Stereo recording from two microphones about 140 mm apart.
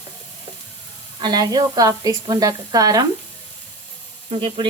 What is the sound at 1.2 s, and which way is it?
Speech, 30° right (ahead or behind).